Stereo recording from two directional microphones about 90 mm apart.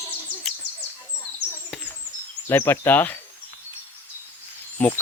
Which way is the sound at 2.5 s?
25° left (ahead or behind).